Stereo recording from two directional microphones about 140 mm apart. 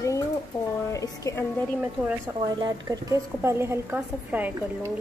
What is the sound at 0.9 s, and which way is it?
Speech, 25° left (ahead or behind).